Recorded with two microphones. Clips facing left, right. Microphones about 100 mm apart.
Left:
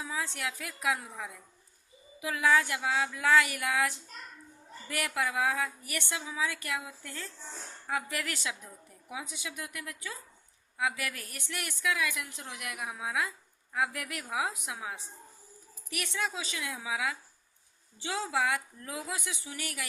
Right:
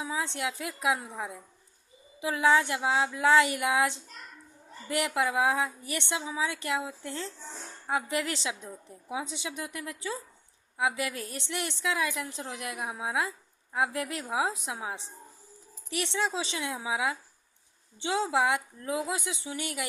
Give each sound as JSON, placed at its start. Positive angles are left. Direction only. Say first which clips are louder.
{"t": 0.0, "sound": "a woman's voice", "louder": "right 4 dB", "side_deg": -20}